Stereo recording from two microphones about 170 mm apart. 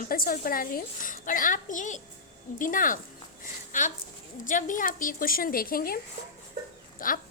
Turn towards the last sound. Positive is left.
turn(degrees=55)  # may be behind; listen again after turning